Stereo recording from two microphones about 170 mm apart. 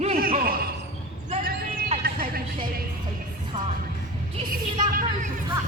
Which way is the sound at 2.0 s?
60° right (ahead or behind).